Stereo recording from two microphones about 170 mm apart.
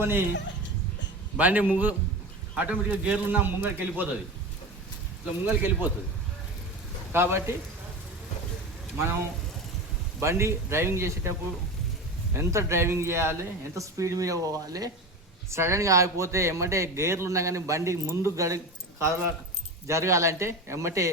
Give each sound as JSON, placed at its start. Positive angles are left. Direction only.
{"t": 0.0, "sound": "speech", "side_deg": -15}
{"t": 1.4, "sound": "speech", "side_deg": -10}
{"t": 5.5, "sound": "speech", "side_deg": -10}
{"t": 7.1, "sound": "speech", "side_deg": -15}
{"t": 10.2, "sound": "a man's voice", "side_deg": -15}